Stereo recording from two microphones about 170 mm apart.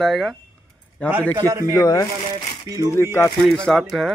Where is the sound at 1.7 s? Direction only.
20° left (ahead or behind).